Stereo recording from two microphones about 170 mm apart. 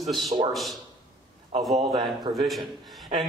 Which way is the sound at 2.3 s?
Centre (ahead or behind).